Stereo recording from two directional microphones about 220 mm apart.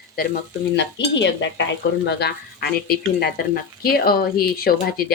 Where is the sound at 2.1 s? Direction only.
50° left (ahead or behind).